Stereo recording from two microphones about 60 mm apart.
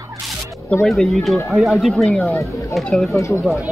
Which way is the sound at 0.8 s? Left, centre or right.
Centre.